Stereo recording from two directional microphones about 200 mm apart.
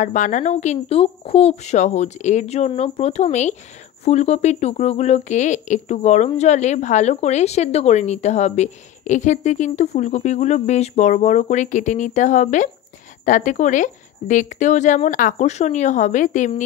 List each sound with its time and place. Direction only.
0.0 s speech: 40° left (ahead or behind)